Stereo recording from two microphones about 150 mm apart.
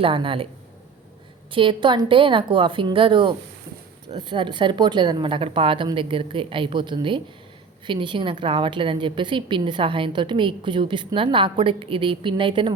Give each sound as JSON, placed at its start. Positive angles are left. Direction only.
{"t": 0.0, "sound": "a woman's voice", "side_deg": -35}
{"t": 1.5, "sound": "a woman's voice", "side_deg": -35}